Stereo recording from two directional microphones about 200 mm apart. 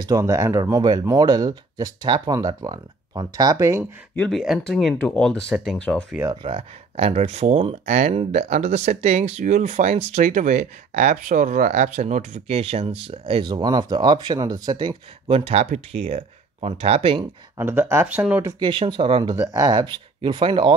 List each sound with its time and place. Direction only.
0.0 s speech: 15° right (ahead or behind)
4.1 s speech: 5° left (ahead or behind)
6.4 s speech: 30° right (ahead or behind)
17.6 s speech: 10° right (ahead or behind)
18.6 s speech: 25° right (ahead or behind)